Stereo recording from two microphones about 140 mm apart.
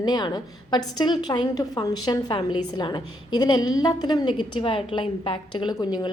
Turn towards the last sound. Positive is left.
turn(degrees=30)  # may be behind; listen again after turning